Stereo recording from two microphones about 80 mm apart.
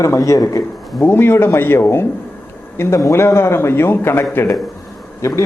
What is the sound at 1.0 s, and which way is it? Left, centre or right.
A man's voice, left.